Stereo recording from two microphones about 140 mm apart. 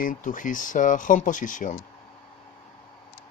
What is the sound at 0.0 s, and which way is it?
Speech, 70° left (ahead or behind).